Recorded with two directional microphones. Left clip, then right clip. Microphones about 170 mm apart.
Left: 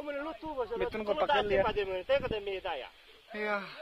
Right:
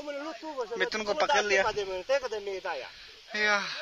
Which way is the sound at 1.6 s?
25° right (ahead or behind).